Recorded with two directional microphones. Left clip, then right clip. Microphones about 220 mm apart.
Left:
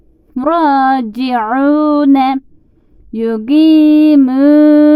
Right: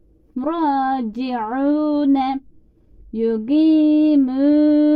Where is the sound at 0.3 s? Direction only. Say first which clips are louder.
Left 9 dB; 35° left (ahead or behind).